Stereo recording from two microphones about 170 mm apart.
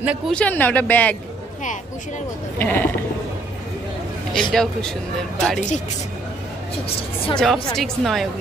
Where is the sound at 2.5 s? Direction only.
10° left (ahead or behind).